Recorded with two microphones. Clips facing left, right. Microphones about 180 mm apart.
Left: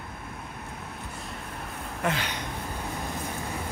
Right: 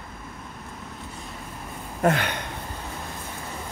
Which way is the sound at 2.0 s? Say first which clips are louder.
Right 7 dB; 55° right (ahead or behind).